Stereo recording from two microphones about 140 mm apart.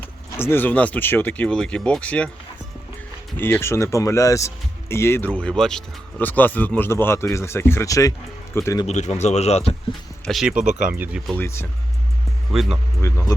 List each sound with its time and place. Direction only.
0.0 s speech: 15° left (ahead or behind)
3.3 s speech: 15° left (ahead or behind)
8.9 s speech: 55° left (ahead or behind)
10.2 s speech: centre (ahead or behind)
10.5 s speech: 70° right (ahead or behind)
10.8 s speech: 10° right (ahead or behind)
11.3 s speech: 20° left (ahead or behind)
12.5 s speech: centre (ahead or behind)
13.0 s speech: 20° left (ahead or behind)